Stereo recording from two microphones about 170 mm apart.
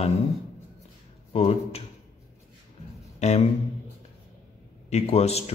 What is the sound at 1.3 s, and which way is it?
Speech, 35° left (ahead or behind).